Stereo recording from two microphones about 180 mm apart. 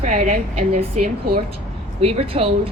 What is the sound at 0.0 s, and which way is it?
A woman's voice, 40° right (ahead or behind).